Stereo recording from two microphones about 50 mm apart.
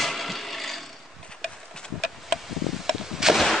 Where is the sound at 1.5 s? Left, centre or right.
Centre.